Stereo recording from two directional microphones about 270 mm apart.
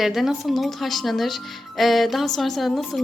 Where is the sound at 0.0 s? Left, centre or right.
Centre.